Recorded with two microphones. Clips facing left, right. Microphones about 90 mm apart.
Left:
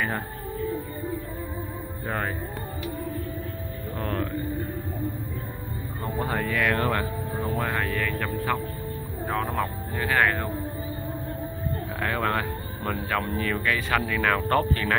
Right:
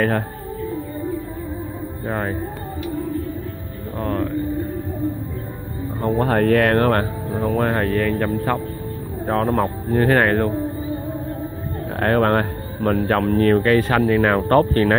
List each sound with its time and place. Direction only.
2.0 s speech: 30° right (ahead or behind)
4.0 s speech: 25° right (ahead or behind)
6.1 s speech: 70° right (ahead or behind); by 7.1 s 55° right (ahead or behind)
7.5 s speech: 45° right (ahead or behind)
12.0 s speech: 50° right (ahead or behind)